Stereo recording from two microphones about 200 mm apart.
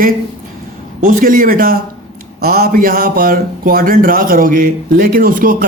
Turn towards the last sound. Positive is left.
turn(degrees=-45)  # may be behind; listen again after turning